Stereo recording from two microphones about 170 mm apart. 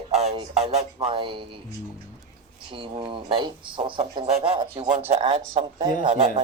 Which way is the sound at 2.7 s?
30° right (ahead or behind).